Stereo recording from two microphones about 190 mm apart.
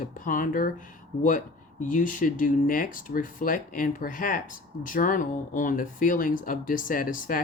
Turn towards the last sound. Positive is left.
turn(degrees=45)  # may be behind; listen again after turning